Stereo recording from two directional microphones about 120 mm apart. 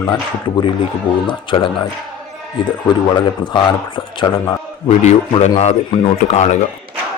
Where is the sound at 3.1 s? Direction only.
40° left (ahead or behind).